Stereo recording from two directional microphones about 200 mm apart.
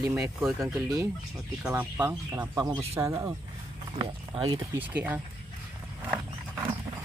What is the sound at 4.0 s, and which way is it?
Speech, 25° right (ahead or behind).